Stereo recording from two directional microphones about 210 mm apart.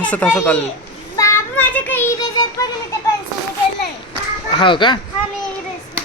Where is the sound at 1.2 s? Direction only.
10° left (ahead or behind).